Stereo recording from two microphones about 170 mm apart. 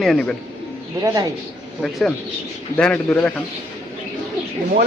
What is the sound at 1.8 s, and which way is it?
Speech, 5° left (ahead or behind).